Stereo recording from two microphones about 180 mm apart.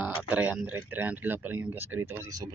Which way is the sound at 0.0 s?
10° right (ahead or behind).